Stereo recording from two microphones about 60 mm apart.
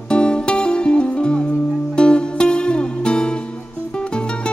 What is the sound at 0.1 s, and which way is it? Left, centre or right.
Music, centre.